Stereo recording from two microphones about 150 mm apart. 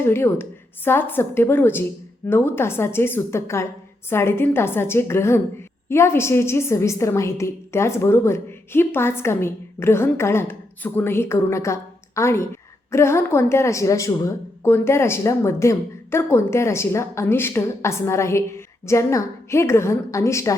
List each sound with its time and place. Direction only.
0.0 s a woman's voice: 15° left (ahead or behind)